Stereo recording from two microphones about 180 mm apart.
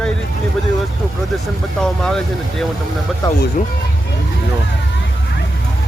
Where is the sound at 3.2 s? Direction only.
20° left (ahead or behind).